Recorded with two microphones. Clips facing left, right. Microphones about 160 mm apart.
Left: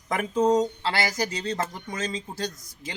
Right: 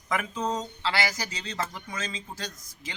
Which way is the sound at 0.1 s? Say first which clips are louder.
Left 7 dB; 45° left (ahead or behind).